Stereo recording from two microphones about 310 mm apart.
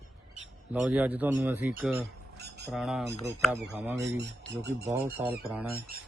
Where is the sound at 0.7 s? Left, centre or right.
Centre.